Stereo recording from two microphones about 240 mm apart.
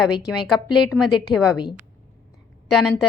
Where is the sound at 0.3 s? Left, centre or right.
Centre.